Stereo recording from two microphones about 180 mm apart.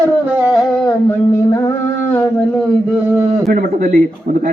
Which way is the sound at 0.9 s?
15° left (ahead or behind).